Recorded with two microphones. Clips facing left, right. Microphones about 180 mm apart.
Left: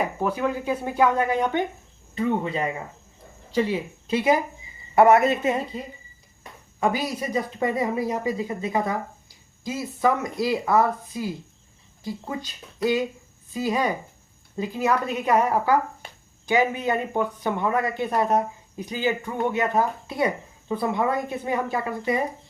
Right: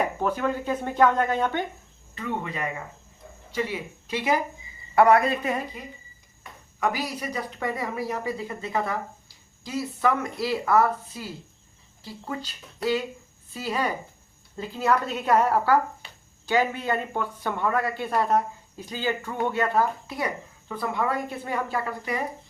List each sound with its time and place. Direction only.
0.2 s speech: 10° left (ahead or behind)
2.1 s speech: 25° left (ahead or behind)
16.0 s a sound: 50° left (ahead or behind)
16.5 s speech: 15° left (ahead or behind)